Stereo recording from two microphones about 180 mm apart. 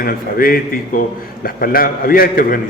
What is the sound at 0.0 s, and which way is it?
A man's voice, 50° left (ahead or behind).